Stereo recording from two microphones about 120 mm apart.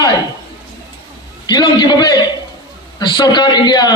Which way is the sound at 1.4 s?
35° left (ahead or behind).